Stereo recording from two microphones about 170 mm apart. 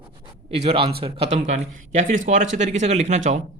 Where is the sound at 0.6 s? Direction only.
35° right (ahead or behind).